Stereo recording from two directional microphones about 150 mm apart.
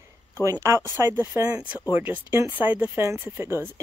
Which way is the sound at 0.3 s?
20° right (ahead or behind).